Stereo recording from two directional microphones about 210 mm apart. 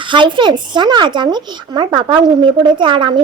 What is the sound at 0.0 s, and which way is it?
A woman's voice, 25° right (ahead or behind).